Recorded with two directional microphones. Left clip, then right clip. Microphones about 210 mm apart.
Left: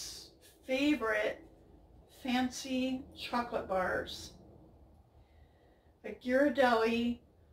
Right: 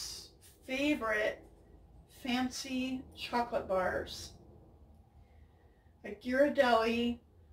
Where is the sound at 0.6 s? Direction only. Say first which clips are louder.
Left 2 dB; 5° right (ahead or behind).